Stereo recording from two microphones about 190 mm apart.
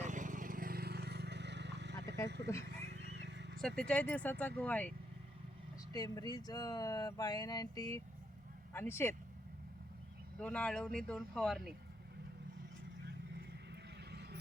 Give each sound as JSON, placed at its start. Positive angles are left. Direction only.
{"t": 0.0, "sound": "vehicle", "side_deg": -40}
{"t": 2.5, "sound": "speech", "side_deg": 15}
{"t": 3.0, "sound": "a sound", "side_deg": -65}
{"t": 3.6, "sound": "speech", "side_deg": 5}
{"t": 5.9, "sound": "speech", "side_deg": 20}
{"t": 10.4, "sound": "speech", "side_deg": 5}